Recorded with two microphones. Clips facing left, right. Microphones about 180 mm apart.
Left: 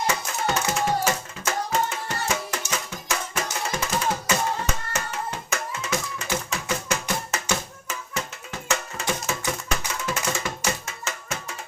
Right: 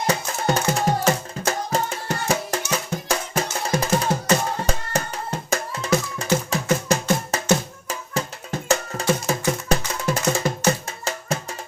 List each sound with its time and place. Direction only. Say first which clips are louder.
0.1 s music: right 4 dB; 35° right (ahead or behind)
8.6 s music: right 6 dB; 35° right (ahead or behind)